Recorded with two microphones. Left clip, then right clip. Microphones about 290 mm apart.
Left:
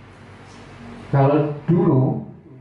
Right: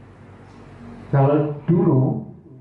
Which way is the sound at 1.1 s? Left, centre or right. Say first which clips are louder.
Left 1 dB; centre.